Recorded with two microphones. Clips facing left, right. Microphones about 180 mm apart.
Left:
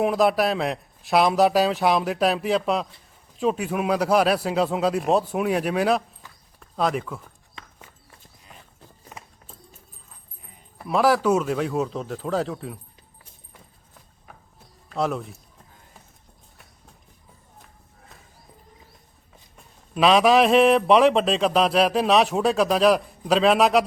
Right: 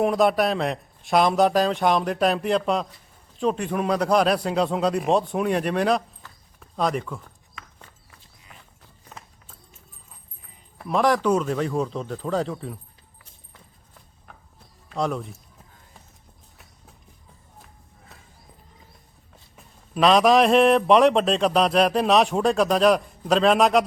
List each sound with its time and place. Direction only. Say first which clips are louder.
0.0 s a man's voice: even; centre (ahead or behind)
10.8 s a man's voice: left 1 dB; 5° left (ahead or behind)
14.8 s speech: left 1 dB; centre (ahead or behind)
19.5 s a man's voice: even; centre (ahead or behind)